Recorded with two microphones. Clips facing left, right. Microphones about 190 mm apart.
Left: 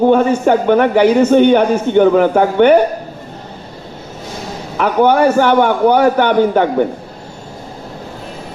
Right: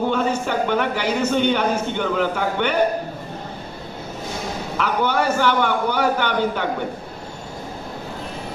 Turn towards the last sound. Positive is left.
turn(degrees=55)  # may be behind; listen again after turning